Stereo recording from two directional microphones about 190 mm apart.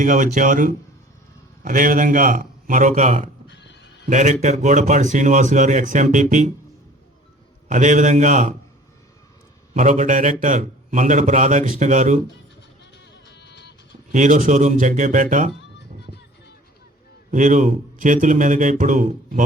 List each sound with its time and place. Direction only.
0.0 s speech: 40° right (ahead or behind)
3.4 s neigh: 70° left (ahead or behind)
4.1 s speech: 40° right (ahead or behind)
7.7 s speech: 40° right (ahead or behind)
9.7 s speech: 40° right (ahead or behind)
12.8 s music: 70° left (ahead or behind)
14.1 s speech: 40° right (ahead or behind)
17.3 s speech: 40° right (ahead or behind)